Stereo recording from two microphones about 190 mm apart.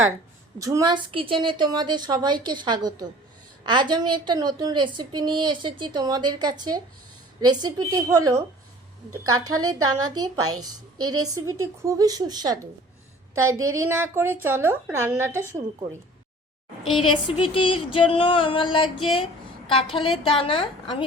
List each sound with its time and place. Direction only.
0.6 s a woman's voice: 20° right (ahead or behind)
13.7 s a woman's voice: 15° right (ahead or behind)
17.0 s a sound: 25° left (ahead or behind)